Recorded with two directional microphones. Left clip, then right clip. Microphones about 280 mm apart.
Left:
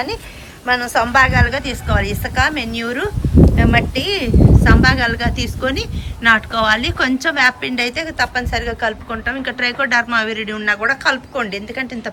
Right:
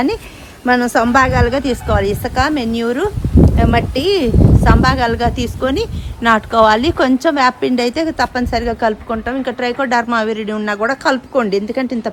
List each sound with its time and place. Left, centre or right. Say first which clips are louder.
0.7 s speech: right 3 dB; centre